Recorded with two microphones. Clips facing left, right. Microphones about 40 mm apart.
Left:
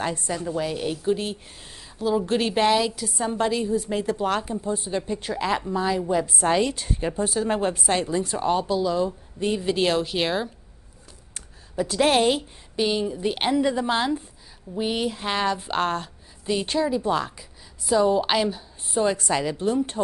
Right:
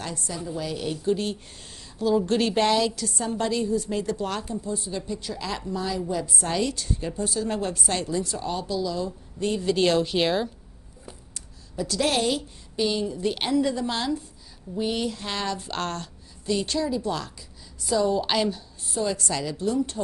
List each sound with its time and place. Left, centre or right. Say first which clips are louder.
0.0 s a woman's voice: left 6 dB; left
1.0 s a woman's voice: right 1 dB; centre; by 9.1 s left
9.4 s a woman's voice: even; centre
11.3 s a woman's voice: left 5 dB; left; by 18.9 s centre
18.9 s a woman's voice: left 4 dB; left